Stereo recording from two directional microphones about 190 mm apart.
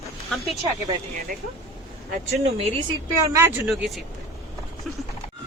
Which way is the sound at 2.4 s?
30° right (ahead or behind).